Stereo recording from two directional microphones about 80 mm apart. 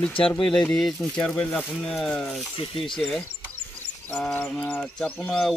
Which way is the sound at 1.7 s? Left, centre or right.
Centre.